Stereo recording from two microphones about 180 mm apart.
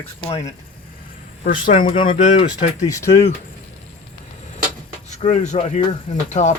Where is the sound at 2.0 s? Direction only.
40° left (ahead or behind).